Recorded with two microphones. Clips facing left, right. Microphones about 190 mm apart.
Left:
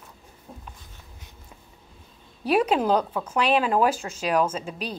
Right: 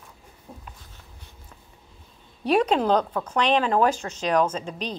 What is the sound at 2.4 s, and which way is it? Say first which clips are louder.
Speech: right 1 dB; 10° left (ahead or behind).